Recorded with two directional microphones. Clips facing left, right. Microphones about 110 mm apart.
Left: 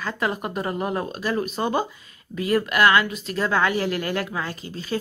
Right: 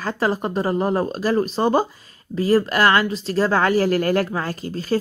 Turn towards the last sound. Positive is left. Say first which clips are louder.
# right 6 dB
turn(degrees=-40)  # may be behind; listen again after turning